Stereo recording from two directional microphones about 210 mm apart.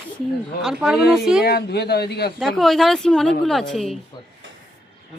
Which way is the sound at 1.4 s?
50° left (ahead or behind).